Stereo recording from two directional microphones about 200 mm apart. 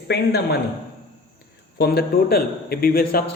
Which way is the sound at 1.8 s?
50° left (ahead or behind).